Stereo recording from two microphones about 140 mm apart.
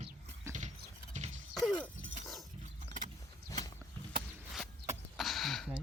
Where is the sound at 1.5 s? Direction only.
Centre (ahead or behind).